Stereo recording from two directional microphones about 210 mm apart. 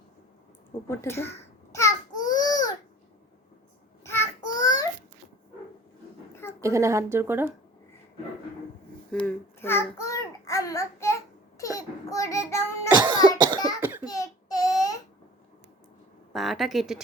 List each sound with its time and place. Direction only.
0.9 s babbling: 10° left (ahead or behind)
4.0 s child singing: 10° left (ahead or behind)
4.4 s child singing: 40° left (ahead or behind)
4.6 s babbling: 20° left (ahead or behind)
6.6 s speech: 15° right (ahead or behind)
9.1 s child singing: 10° left (ahead or behind)
13.0 s cough: 20° right (ahead or behind)
14.1 s child singing: 15° left (ahead or behind)
16.3 s speech: centre (ahead or behind)